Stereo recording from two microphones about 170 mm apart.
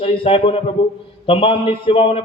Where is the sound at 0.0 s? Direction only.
30° left (ahead or behind).